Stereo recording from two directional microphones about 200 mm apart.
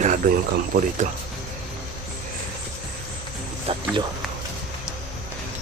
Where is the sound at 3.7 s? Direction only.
30° right (ahead or behind).